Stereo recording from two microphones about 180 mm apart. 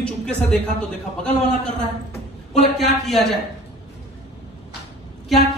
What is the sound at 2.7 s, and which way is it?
Speech, centre (ahead or behind).